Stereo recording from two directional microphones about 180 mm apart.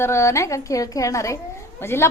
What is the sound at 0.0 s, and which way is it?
A woman's voice, 15° left (ahead or behind).